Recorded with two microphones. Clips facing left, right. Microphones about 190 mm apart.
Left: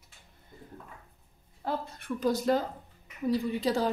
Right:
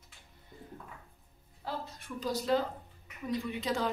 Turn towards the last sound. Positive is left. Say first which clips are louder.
# left 5 dB
turn(degrees=35)  # may be behind; listen again after turning